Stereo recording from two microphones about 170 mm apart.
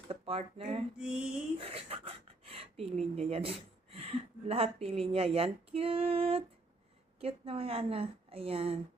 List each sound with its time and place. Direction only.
0.1 s speech: 35° right (ahead or behind)
0.9 s a sound: 5° right (ahead or behind)
1.5 s speech: 35° right (ahead or behind)